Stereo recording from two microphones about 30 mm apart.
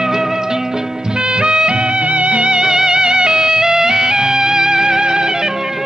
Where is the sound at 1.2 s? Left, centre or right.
Right.